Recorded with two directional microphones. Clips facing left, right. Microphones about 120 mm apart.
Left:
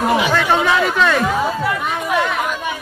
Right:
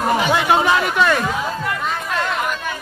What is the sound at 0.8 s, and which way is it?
Speech, 5° right (ahead or behind).